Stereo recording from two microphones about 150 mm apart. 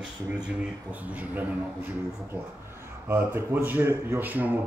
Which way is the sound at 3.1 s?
15° right (ahead or behind).